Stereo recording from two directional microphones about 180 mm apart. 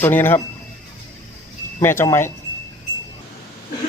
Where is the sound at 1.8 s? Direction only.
15° left (ahead or behind).